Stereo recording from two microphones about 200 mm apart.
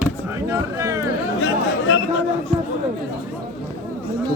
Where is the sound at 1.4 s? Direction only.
70° left (ahead or behind).